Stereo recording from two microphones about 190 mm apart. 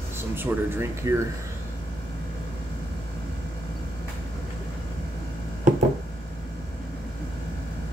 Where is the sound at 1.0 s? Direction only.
15° right (ahead or behind).